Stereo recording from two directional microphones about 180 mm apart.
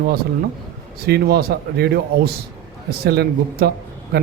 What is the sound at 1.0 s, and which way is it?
Speech, 65° right (ahead or behind).